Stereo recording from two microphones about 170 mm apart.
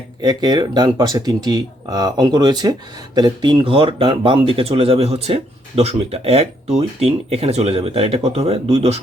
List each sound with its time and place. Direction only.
0.2 s speech: 25° right (ahead or behind)